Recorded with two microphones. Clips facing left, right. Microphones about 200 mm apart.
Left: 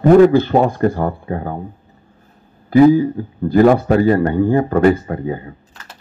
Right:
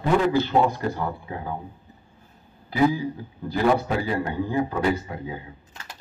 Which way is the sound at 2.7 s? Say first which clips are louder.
Left 12 dB; 55° left (ahead or behind).